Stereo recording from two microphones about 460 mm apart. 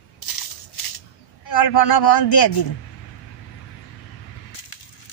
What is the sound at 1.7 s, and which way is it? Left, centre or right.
Speech, left.